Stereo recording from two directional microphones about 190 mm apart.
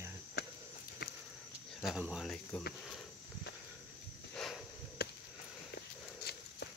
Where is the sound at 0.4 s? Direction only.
60° left (ahead or behind).